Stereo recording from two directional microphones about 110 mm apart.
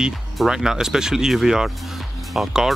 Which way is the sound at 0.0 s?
5° right (ahead or behind).